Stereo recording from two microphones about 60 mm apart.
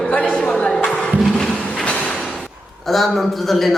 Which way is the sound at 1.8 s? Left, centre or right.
Centre.